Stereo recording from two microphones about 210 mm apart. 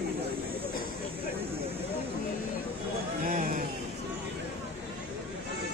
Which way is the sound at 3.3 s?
40° right (ahead or behind).